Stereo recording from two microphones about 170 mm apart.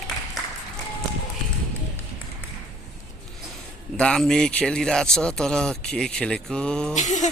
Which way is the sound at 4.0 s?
5° left (ahead or behind).